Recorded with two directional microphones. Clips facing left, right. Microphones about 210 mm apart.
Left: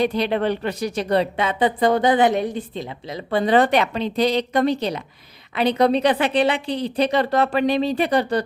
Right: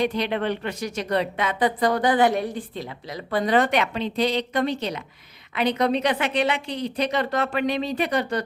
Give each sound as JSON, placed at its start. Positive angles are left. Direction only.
{"t": 0.0, "sound": "a woman's voice", "side_deg": 35}